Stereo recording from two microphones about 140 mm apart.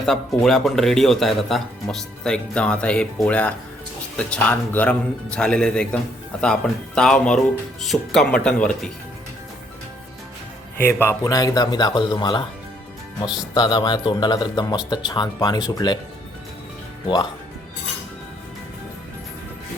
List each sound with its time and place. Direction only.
0.4 s speech: centre (ahead or behind)
10.8 s a man's voice: 15° left (ahead or behind)